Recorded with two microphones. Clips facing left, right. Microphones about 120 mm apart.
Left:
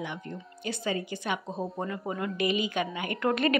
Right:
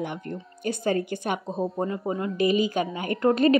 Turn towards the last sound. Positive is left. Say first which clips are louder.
# right 6 dB
turn(degrees=-35)  # may be behind; listen again after turning